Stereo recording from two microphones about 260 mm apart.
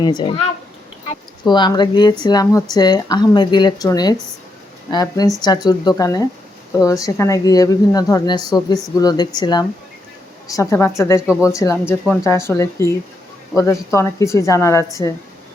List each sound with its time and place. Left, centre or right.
0.0 s a woman's voice: centre
1.5 s a woman's voice: centre
11.2 s speech: centre
11.4 s a woman's voice: centre
13.9 s a woman's voice: centre